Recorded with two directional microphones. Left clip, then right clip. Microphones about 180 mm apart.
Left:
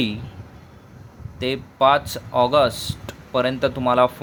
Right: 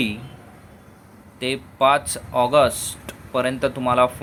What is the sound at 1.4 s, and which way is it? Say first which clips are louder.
Speech: left 1 dB; 10° left (ahead or behind).